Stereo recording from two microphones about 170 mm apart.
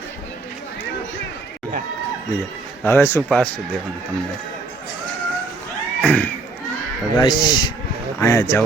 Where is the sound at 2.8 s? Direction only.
15° left (ahead or behind).